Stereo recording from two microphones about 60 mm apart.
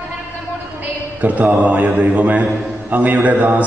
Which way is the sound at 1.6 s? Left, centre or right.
Right.